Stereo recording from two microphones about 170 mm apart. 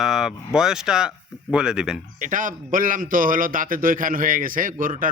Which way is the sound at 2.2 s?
50° right (ahead or behind).